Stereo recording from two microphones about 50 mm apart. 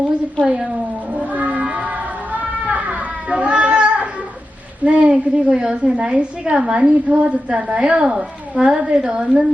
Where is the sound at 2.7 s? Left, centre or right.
Right.